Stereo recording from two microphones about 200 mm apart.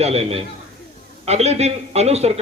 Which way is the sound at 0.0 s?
30° right (ahead or behind).